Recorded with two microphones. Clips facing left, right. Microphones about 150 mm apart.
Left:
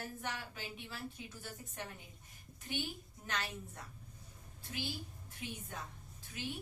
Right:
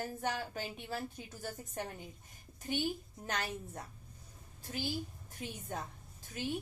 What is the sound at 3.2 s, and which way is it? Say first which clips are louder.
Speech: right 3 dB; 40° right (ahead or behind).